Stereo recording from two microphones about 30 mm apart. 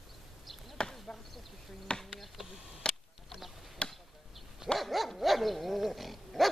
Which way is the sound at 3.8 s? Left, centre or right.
Left.